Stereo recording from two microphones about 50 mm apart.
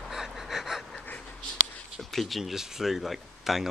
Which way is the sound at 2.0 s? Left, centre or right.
Centre.